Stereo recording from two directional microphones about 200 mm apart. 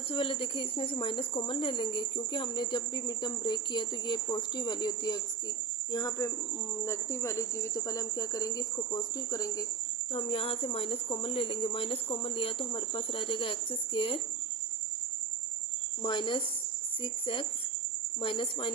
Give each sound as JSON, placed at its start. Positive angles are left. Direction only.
{"t": 0.1, "sound": "speech", "side_deg": 25}
{"t": 16.0, "sound": "speech", "side_deg": 25}